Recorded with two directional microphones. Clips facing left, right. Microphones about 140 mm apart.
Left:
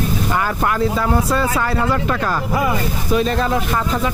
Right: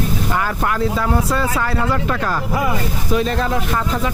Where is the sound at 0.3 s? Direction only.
25° left (ahead or behind).